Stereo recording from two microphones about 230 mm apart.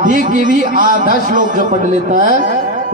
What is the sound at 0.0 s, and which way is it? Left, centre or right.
A man's voice, right.